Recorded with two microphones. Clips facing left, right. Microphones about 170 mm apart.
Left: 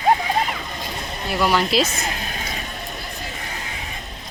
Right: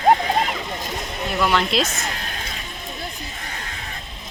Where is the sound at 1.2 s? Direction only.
5° left (ahead or behind).